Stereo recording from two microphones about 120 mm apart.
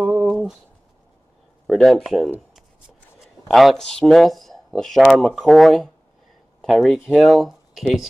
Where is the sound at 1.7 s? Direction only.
Centre (ahead or behind).